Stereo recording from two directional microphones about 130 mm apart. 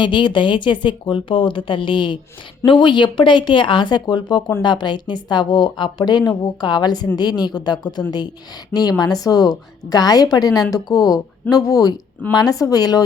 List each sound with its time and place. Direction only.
0.0 s speech: 40° left (ahead or behind)